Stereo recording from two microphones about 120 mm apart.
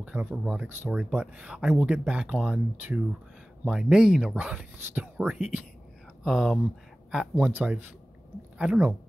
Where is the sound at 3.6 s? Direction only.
5° right (ahead or behind).